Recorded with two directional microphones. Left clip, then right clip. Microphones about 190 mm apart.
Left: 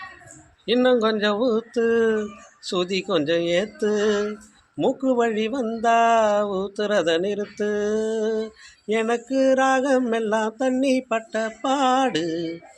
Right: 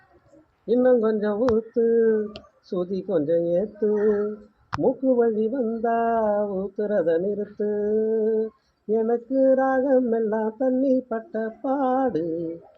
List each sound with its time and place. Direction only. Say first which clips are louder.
0.7 s speech: even; 35° left (ahead or behind)